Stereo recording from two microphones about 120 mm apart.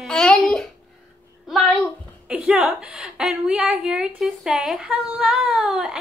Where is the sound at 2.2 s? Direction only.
10° right (ahead or behind).